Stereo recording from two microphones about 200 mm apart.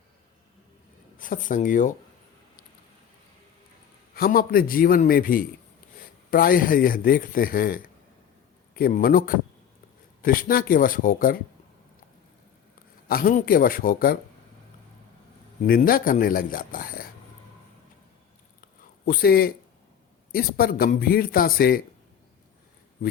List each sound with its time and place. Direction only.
1.2 s speech: 40° left (ahead or behind)
4.1 s speech: 45° left (ahead or behind)
13.1 s speech: 45° left (ahead or behind)
15.6 s speech: 45° left (ahead or behind)
19.0 s speech: 50° left (ahead or behind)